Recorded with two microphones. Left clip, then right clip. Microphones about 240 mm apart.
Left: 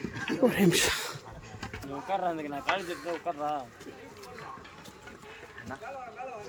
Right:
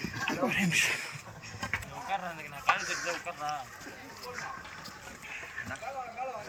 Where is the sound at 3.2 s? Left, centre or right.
Left.